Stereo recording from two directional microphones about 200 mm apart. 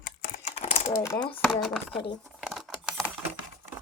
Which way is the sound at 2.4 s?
Centre (ahead or behind).